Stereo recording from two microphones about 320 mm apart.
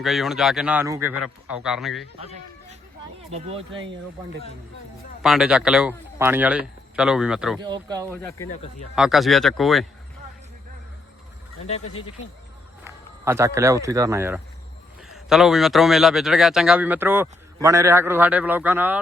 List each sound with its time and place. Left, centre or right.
0.0 s speech: centre
2.1 s speech: centre
5.2 s speech: centre
7.6 s speech: centre
8.1 s speech: centre
12.8 s speech: centre